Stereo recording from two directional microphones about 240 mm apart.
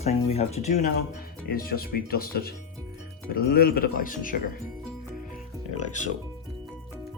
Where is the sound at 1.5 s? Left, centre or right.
Left.